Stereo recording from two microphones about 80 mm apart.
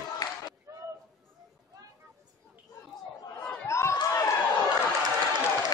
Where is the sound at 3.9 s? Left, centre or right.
Left.